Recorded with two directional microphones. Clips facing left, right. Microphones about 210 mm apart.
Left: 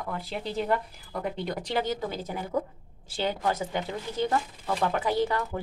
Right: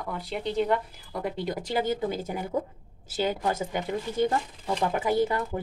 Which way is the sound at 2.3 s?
15° right (ahead or behind).